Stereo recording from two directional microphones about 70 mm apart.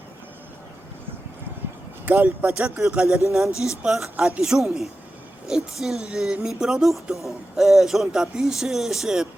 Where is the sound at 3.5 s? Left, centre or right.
Left.